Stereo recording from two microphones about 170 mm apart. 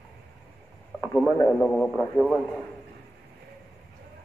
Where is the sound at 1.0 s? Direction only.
20° left (ahead or behind).